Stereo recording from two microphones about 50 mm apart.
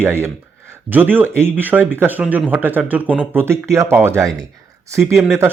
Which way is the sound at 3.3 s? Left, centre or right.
Right.